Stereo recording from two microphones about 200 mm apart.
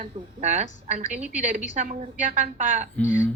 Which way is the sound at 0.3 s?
35° right (ahead or behind).